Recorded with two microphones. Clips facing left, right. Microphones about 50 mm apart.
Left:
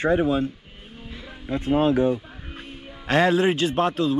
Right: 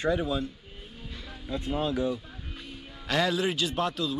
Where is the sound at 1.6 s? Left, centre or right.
Left.